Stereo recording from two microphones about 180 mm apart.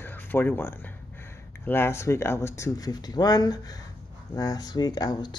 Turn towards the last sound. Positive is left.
turn(degrees=20)  # may be behind; listen again after turning